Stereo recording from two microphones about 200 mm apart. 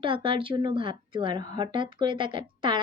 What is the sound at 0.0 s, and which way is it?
A woman's voice, 25° right (ahead or behind).